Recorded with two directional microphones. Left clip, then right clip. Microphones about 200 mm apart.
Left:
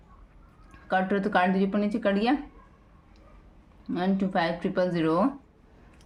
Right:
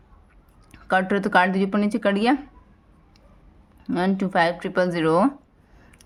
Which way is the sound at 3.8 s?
45° right (ahead or behind).